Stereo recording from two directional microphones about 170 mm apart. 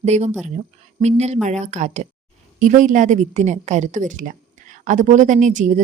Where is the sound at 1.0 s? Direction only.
40° right (ahead or behind).